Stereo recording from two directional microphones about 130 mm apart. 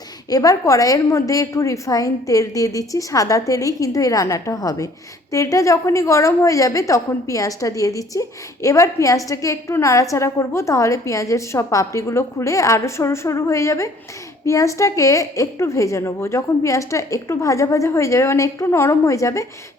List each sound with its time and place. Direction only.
0.3 s a woman's voice: 25° left (ahead or behind)